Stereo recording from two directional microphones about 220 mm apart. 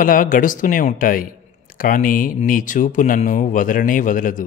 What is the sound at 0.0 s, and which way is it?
A man's voice, 40° left (ahead or behind).